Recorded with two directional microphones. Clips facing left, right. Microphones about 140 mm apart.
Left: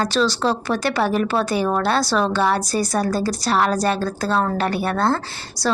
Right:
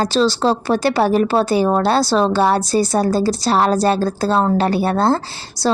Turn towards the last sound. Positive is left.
turn(degrees=-30)  # may be behind; listen again after turning